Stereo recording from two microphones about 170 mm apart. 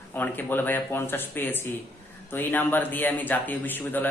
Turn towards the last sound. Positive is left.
turn(degrees=10)  # may be behind; listen again after turning